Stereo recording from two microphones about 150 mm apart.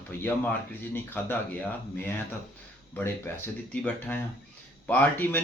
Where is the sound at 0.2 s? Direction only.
15° left (ahead or behind).